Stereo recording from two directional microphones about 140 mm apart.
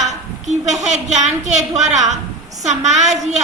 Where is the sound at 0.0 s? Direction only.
55° right (ahead or behind).